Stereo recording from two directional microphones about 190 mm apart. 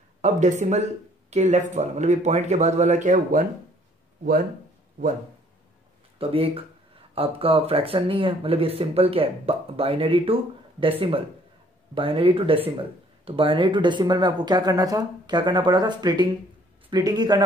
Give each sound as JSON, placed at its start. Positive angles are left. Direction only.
{"t": 0.2, "sound": "speech", "side_deg": -40}
{"t": 6.1, "sound": "speech", "side_deg": -30}